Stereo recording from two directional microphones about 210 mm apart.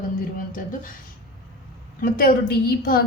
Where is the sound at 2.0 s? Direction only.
40° left (ahead or behind).